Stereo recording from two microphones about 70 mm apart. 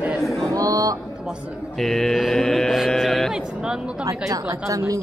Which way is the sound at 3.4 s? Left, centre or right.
Centre.